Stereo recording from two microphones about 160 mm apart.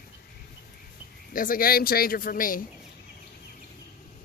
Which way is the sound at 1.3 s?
60° left (ahead or behind).